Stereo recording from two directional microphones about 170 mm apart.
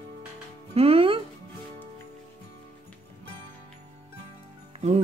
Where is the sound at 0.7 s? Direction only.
35° right (ahead or behind).